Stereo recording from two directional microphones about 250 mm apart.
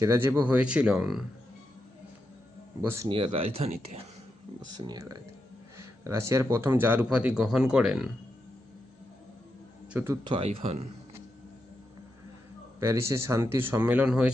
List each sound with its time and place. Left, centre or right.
0.0 s speech: centre
2.8 s speech: centre
9.9 s speech: centre
10.3 s speech: right
12.8 s speech: centre